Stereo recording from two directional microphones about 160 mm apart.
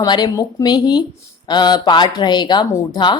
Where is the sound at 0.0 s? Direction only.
25° left (ahead or behind).